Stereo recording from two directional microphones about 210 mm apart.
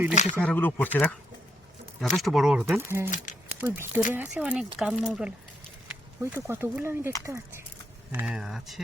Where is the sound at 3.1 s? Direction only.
35° left (ahead or behind).